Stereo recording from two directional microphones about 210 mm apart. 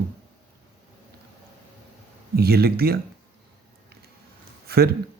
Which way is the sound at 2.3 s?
45° right (ahead or behind).